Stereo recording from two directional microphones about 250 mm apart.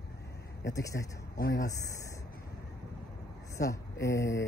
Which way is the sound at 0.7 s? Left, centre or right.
Centre.